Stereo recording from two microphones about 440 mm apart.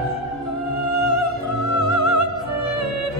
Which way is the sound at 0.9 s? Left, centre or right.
Right.